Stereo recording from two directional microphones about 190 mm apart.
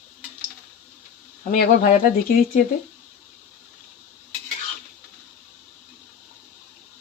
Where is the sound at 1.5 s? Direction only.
45° left (ahead or behind).